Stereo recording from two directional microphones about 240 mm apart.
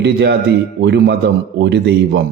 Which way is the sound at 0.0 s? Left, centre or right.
Right.